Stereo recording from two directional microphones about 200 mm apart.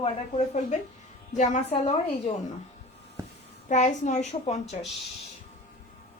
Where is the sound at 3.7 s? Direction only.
35° left (ahead or behind).